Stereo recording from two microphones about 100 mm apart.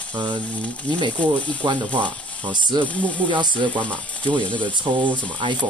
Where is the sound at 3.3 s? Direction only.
50° right (ahead or behind).